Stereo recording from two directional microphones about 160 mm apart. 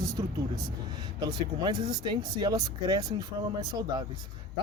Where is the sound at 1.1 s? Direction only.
25° right (ahead or behind).